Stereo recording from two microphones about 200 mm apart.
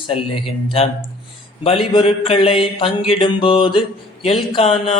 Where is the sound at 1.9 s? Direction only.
25° left (ahead or behind).